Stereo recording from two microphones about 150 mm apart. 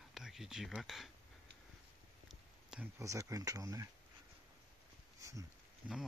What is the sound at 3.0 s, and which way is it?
Speech, 20° right (ahead or behind).